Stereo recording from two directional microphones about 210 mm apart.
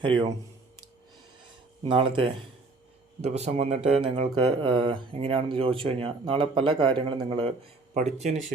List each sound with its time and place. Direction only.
0.0 s speech: 25° right (ahead or behind)
1.8 s speech: 25° right (ahead or behind)